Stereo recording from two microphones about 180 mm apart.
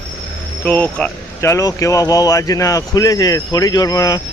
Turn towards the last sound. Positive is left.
turn(degrees=20)  # may be behind; listen again after turning